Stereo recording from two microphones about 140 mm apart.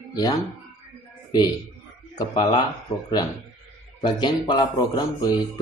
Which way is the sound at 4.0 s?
30° left (ahead or behind).